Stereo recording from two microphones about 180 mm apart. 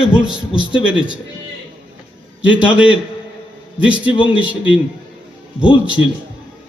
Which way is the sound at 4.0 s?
30° left (ahead or behind).